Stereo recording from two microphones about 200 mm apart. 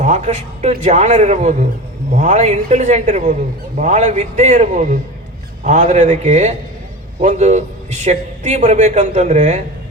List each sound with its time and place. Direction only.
0.0 s a man's voice: 40° right (ahead or behind)